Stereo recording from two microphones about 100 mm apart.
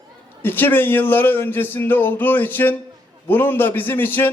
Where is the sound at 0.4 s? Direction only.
20° left (ahead or behind).